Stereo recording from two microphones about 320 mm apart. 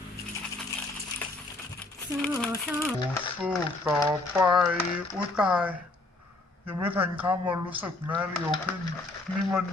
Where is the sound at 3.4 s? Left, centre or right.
Centre.